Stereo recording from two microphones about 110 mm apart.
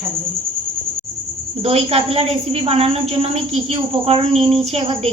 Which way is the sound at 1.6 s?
65° right (ahead or behind).